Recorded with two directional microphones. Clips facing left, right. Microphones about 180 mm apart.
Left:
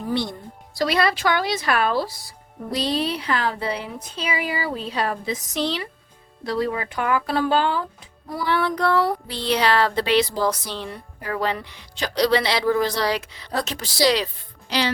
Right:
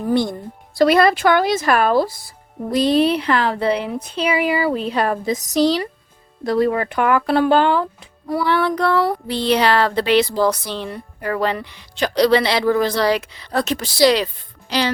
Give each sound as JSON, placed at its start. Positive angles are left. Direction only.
{"t": 0.1, "sound": "speech", "side_deg": -50}
{"t": 6.4, "sound": "speech", "side_deg": -50}
{"t": 14.7, "sound": "speech", "side_deg": -45}